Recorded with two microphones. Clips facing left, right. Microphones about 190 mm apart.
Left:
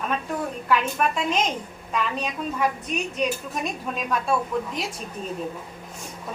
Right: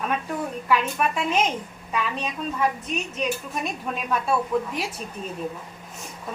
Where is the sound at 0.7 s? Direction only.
5° right (ahead or behind).